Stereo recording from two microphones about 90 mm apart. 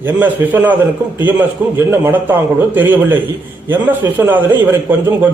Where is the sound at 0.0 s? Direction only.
20° right (ahead or behind).